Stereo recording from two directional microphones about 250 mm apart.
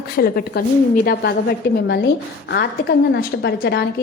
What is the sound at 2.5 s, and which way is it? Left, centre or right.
A woman's voice, left.